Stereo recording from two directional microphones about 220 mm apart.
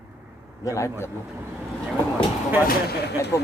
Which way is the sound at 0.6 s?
15° left (ahead or behind).